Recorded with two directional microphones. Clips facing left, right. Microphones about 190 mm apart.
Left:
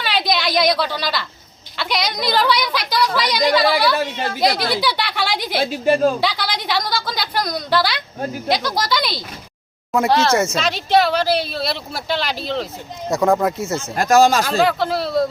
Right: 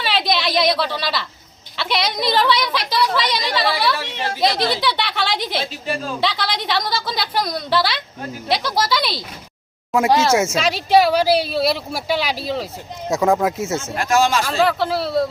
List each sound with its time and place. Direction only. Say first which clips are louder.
0.0 s a sound: even; centre (ahead or behind)
1.7 s a woman's voice: right 1 dB; centre (ahead or behind)
4.5 s speech: right 1 dB; 25° right (ahead or behind)
4.8 s a woman's voice: even; centre (ahead or behind)
5.8 s speech: left 10 dB; 45° left (ahead or behind)
6.1 s a woman's voice: even; centre (ahead or behind)
13.9 s speech: left 5 dB; 40° left (ahead or behind)
14.4 s a woman's voice: left 1 dB; centre (ahead or behind)